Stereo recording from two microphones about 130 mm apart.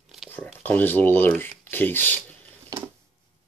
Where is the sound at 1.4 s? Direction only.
15° left (ahead or behind).